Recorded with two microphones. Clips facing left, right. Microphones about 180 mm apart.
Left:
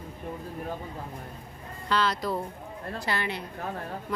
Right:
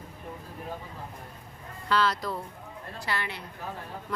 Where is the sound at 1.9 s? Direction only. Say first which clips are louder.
Even; centre (ahead or behind).